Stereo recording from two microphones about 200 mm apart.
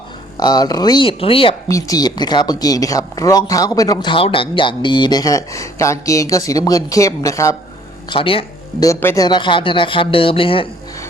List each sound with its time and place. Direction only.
0.3 s speech: 20° left (ahead or behind)
1.6 s speech: 15° left (ahead or behind)
8.1 s speech: 25° left (ahead or behind)
8.9 s speech: 15° left (ahead or behind)